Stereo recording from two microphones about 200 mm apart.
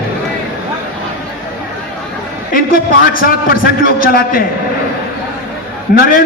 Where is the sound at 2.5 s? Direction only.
45° left (ahead or behind).